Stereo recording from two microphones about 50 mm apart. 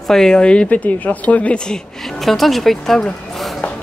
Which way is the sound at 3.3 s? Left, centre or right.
Centre.